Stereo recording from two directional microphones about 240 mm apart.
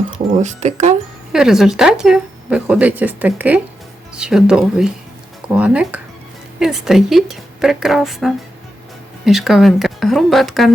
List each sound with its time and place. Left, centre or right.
0.4 s speech: right
1.3 s speech: centre